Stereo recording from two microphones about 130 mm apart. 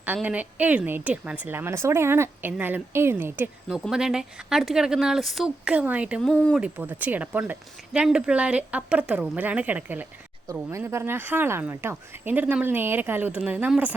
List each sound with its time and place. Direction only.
0.0 s speech: 10° right (ahead or behind)
3.7 s a woman's voice: 5° right (ahead or behind)
6.2 s speech: 5° left (ahead or behind)
6.6 s speech: 15° right (ahead or behind)